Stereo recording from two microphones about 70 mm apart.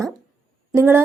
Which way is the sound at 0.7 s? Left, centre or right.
Right.